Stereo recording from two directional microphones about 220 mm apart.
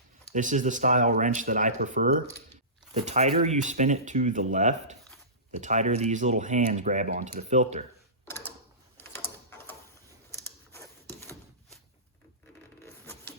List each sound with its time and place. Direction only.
0.3 s speech: 35° right (ahead or behind)
8.2 s a sound: 10° left (ahead or behind)
10.3 s typewriter: 10° left (ahead or behind)
12.8 s printer: 10° left (ahead or behind)